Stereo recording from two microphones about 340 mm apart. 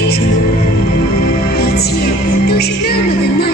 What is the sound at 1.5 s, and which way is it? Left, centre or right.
Music, left.